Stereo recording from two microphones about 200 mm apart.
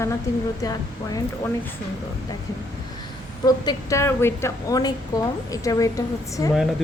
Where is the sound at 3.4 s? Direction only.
15° left (ahead or behind).